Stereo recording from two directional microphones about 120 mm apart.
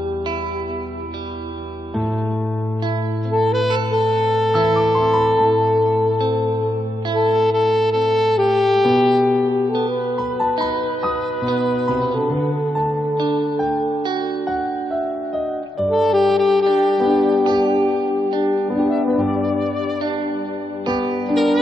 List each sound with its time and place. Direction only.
3.3 s music: centre (ahead or behind)
7.2 s music: centre (ahead or behind)
9.7 s music: 40° right (ahead or behind)
11.5 s music: centre (ahead or behind)
13.4 s music: centre (ahead or behind)
15.8 s saxophone: centre (ahead or behind)
16.9 s music: centre (ahead or behind)
17.4 s music: 40° right (ahead or behind)
18.8 s music: centre (ahead or behind)
21.3 s music: centre (ahead or behind)